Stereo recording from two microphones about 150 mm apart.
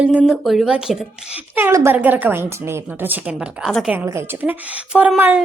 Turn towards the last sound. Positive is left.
turn(degrees=-10)  # may be behind; listen again after turning